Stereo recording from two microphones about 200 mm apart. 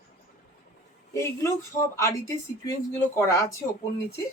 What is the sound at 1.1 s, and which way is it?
Speech, 15° left (ahead or behind).